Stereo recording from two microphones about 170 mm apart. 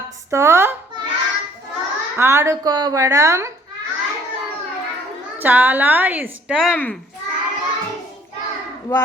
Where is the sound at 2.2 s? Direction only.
15° right (ahead or behind).